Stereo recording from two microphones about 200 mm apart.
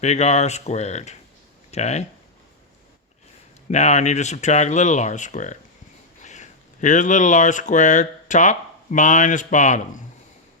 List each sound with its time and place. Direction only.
0.0 s speech: 35° left (ahead or behind)
3.7 s speech: 35° left (ahead or behind)